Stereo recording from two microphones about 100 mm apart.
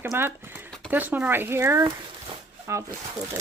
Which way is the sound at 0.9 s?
15° right (ahead or behind).